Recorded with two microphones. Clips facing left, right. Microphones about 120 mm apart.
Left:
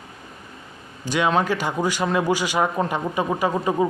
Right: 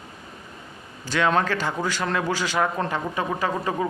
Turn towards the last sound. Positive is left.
turn(degrees=20)  # may be behind; listen again after turning